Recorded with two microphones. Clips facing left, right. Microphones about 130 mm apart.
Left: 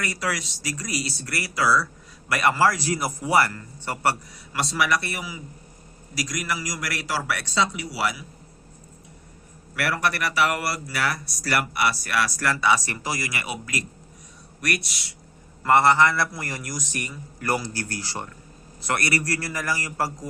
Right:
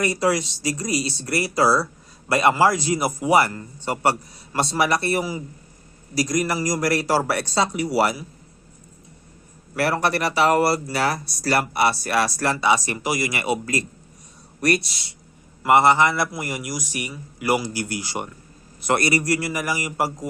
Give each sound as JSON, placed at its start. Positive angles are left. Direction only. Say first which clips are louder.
{"t": 0.0, "sound": "speech", "louder": "right 8 dB", "side_deg": -25}
{"t": 9.7, "sound": "speech", "louder": "right 4 dB", "side_deg": -30}
{"t": 15.6, "sound": "a man's voice", "louder": "right 2 dB", "side_deg": -15}